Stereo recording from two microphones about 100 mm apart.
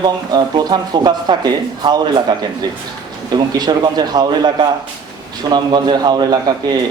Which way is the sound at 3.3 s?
45° right (ahead or behind).